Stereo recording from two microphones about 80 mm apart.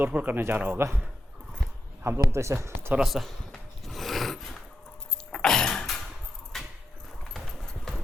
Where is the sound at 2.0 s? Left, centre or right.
Right.